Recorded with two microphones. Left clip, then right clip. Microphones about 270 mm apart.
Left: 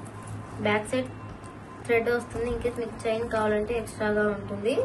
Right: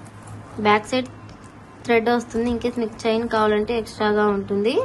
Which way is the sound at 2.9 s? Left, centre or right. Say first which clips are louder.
Right 8 dB; centre.